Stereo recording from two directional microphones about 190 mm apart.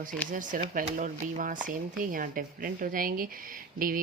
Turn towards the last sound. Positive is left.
turn(degrees=-45)  # may be behind; listen again after turning